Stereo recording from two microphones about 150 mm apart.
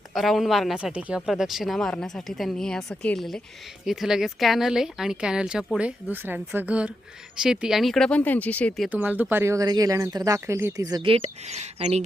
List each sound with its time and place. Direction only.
0.1 s a woman's voice: centre (ahead or behind)
8.9 s speech: 10° right (ahead or behind)
11.0 s speech: 40° right (ahead or behind)